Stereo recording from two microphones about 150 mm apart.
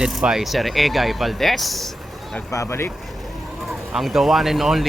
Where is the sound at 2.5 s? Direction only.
20° left (ahead or behind).